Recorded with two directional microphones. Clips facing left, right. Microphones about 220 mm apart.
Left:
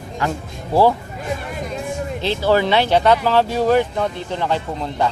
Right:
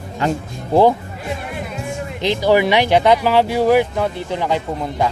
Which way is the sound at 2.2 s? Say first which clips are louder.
Right 3 dB; 15° right (ahead or behind).